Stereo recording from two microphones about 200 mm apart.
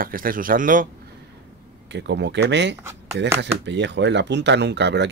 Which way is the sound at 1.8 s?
60° right (ahead or behind).